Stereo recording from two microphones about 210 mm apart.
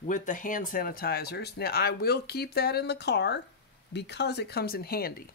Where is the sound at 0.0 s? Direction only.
35° left (ahead or behind).